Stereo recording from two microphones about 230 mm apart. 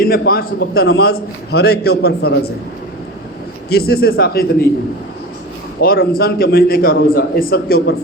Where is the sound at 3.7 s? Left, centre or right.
Left.